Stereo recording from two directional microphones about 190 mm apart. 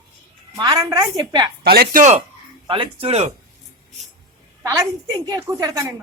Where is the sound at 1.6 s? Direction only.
55° right (ahead or behind).